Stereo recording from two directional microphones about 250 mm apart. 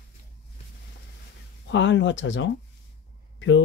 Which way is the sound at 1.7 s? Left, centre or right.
Left.